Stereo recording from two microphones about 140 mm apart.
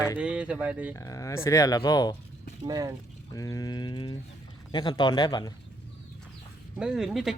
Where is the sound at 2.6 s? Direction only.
25° right (ahead or behind).